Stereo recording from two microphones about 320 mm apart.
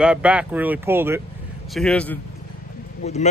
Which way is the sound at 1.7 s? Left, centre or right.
Centre.